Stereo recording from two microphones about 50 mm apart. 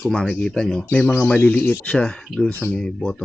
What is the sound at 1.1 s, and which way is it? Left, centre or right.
Speech, left.